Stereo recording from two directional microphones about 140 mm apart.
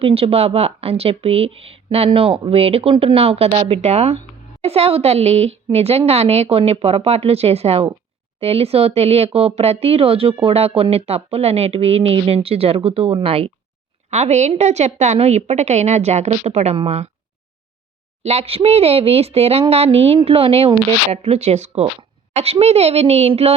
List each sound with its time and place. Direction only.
0.0 s a woman's voice: 45° right (ahead or behind)
18.2 s a woman's voice: 50° right (ahead or behind)